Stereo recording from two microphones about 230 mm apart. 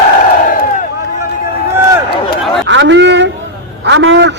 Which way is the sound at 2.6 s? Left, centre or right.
Right.